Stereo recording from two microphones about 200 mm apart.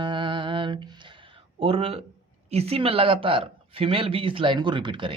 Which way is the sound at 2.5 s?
30° right (ahead or behind).